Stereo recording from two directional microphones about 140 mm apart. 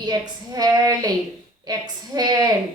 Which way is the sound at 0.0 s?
30° right (ahead or behind).